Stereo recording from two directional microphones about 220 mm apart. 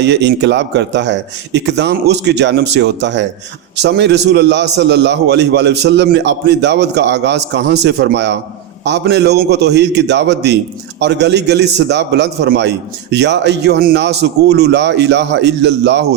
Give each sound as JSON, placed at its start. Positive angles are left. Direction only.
{"t": 0.0, "sound": "a man's voice", "side_deg": -50}